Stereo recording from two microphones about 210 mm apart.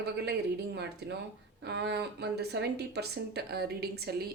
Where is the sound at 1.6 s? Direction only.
55° right (ahead or behind).